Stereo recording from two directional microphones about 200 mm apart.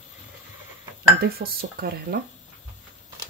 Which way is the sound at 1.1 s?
50° right (ahead or behind).